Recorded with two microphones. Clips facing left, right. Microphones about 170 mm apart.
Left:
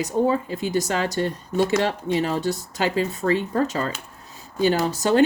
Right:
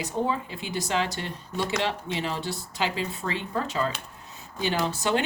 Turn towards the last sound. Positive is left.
turn(degrees=40)  # may be behind; listen again after turning